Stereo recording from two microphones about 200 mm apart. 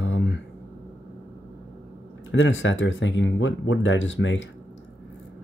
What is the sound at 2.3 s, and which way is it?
Speech, 70° left (ahead or behind).